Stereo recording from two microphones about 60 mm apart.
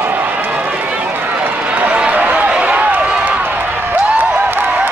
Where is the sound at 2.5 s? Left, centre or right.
Right.